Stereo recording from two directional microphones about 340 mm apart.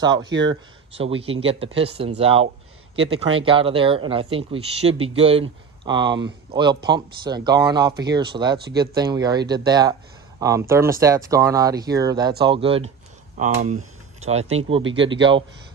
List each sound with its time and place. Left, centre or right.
0.0 s speech: centre
0.3 s speech: right
0.9 s speech: centre
8.5 s speech: right
8.8 s speech: centre